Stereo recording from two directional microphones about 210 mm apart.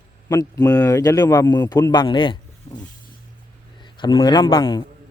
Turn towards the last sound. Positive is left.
turn(degrees=20)  # may be behind; listen again after turning